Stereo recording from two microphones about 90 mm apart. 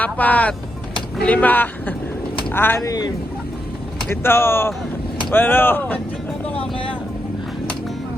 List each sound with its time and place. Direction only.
0.0 s speech: 15° left (ahead or behind)
2.8 s speech: 45° left (ahead or behind)
4.1 s speech: 25° left (ahead or behind)
6.5 s vehicle: 80° left